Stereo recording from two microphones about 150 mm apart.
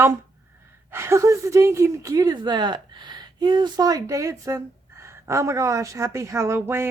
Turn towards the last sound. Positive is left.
turn(degrees=-15)  # may be behind; listen again after turning